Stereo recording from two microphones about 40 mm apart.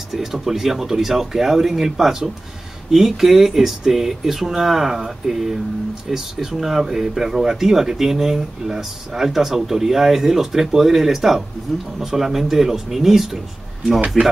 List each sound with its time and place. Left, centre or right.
0.1 s speech: centre